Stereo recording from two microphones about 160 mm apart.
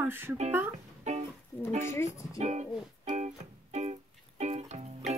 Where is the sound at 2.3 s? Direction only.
45° right (ahead or behind).